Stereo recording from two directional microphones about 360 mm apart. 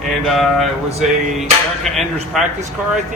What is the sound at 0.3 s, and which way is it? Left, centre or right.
A man's voice, centre.